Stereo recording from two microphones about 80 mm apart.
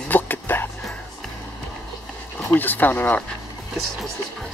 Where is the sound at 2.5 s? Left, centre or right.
Left.